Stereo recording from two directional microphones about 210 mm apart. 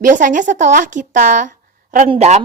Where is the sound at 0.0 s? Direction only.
40° right (ahead or behind).